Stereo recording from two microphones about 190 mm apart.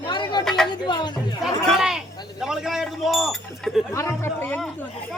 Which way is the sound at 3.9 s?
15° left (ahead or behind).